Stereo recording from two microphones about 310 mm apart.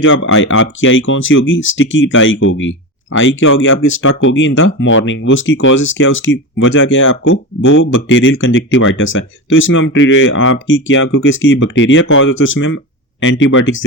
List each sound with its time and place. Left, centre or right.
0.0 s speech: left